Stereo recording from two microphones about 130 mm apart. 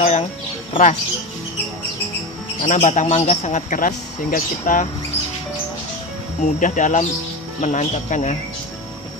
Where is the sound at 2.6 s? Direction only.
70° left (ahead or behind).